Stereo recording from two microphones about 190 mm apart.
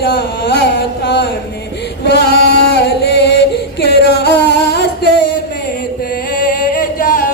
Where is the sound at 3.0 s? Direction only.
60° left (ahead or behind).